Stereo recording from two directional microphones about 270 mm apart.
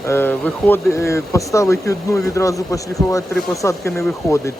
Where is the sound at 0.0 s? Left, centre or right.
Centre.